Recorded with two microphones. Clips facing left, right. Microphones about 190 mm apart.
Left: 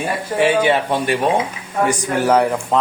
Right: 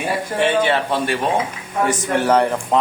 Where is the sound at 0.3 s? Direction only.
10° left (ahead or behind).